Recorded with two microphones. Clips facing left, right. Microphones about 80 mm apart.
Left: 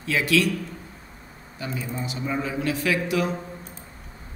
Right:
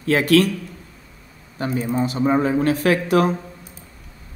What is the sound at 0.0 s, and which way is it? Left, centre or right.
Speech, right.